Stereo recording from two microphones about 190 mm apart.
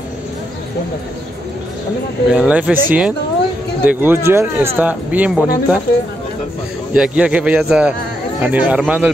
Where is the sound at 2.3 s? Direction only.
5° right (ahead or behind).